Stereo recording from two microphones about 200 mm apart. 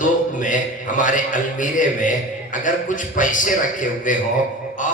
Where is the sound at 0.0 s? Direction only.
40° left (ahead or behind).